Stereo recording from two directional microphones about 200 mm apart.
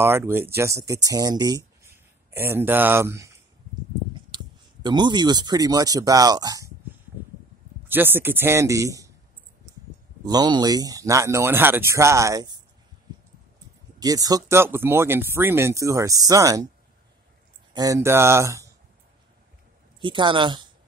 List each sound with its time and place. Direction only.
0.0 s speech: 10° right (ahead or behind)
4.3 s a sound: 20° right (ahead or behind)
4.8 s speech: 20° right (ahead or behind)
7.9 s speech: 10° right (ahead or behind)
10.2 s speech: 20° right (ahead or behind)
13.9 s speech: 20° right (ahead or behind)
17.7 s speech: 15° right (ahead or behind)
20.0 s speech: 25° right (ahead or behind)